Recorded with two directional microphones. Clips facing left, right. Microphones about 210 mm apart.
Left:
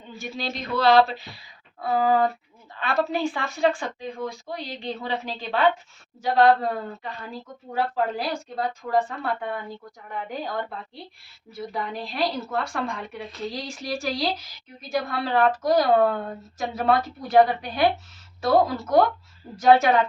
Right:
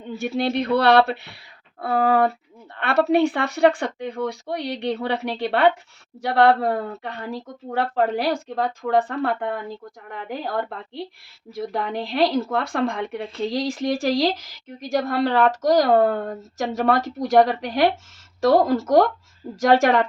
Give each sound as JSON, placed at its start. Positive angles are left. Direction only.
{"t": 0.0, "sound": "a woman's voice", "side_deg": -60}
{"t": 8.6, "sound": "speech", "side_deg": -55}
{"t": 13.5, "sound": "a woman's voice", "side_deg": -90}
{"t": 16.0, "sound": "a woman's voice", "side_deg": -45}
{"t": 16.6, "sound": "a woman's voice", "side_deg": -80}
{"t": 18.6, "sound": "a woman's voice", "side_deg": -45}
{"t": 19.5, "sound": "speech", "side_deg": -90}